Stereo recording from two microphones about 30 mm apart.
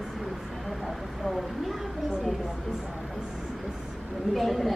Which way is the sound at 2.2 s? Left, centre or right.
Centre.